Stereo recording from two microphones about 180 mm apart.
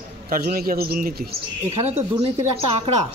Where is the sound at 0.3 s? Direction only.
55° right (ahead or behind).